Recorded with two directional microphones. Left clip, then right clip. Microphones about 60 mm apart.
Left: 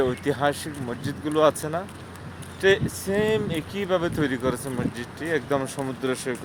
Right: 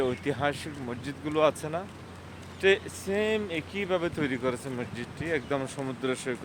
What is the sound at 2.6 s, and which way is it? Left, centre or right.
Speech, left.